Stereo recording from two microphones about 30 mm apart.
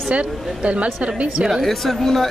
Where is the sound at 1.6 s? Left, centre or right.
Centre.